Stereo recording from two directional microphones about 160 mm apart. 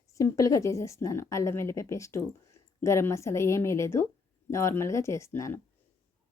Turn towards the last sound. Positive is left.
turn(degrees=15)  # may be behind; listen again after turning